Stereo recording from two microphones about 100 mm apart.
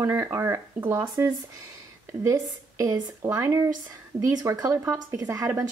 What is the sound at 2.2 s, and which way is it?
Speech, 30° right (ahead or behind).